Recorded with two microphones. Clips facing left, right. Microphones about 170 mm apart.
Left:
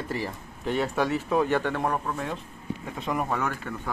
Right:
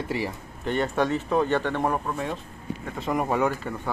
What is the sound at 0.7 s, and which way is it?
Speech, 5° left (ahead or behind).